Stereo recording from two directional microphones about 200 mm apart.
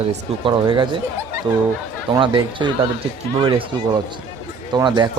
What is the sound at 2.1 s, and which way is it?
Speech, 25° right (ahead or behind).